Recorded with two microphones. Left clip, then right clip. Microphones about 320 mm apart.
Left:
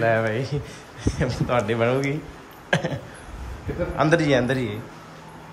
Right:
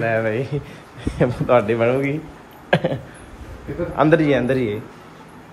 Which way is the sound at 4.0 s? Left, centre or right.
Centre.